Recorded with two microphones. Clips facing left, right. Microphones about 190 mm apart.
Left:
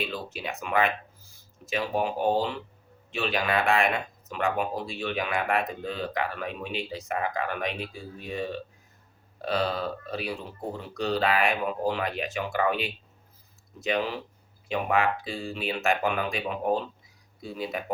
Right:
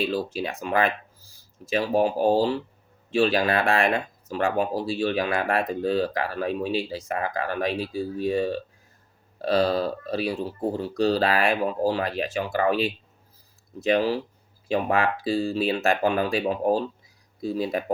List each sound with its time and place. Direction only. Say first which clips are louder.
0.1 s speech: right 7 dB; 35° right (ahead or behind)